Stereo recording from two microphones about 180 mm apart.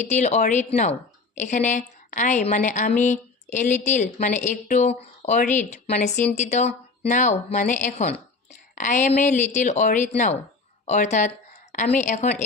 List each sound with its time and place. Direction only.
0.0 s a woman's voice: 40° left (ahead or behind)